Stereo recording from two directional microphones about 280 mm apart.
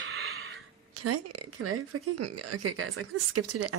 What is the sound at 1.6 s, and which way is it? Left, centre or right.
Speech, right.